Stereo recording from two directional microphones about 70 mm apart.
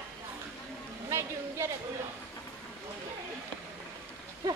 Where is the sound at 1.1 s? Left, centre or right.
Right.